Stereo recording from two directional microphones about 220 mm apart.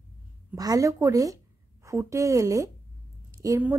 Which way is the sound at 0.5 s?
15° right (ahead or behind).